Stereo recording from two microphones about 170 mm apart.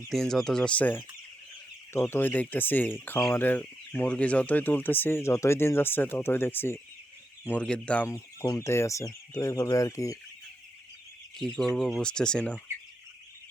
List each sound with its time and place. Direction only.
0.1 s speech: centre (ahead or behind); by 10.2 s 20° left (ahead or behind)
11.3 s speech: 5° left (ahead or behind)